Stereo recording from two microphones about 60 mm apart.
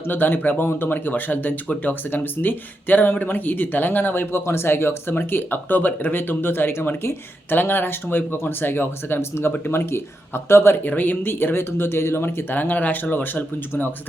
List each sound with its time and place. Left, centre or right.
0.1 s speech: left